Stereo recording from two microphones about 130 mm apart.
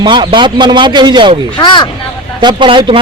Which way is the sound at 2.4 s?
35° right (ahead or behind).